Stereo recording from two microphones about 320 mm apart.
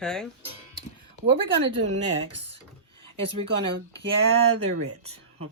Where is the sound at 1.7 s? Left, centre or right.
Centre.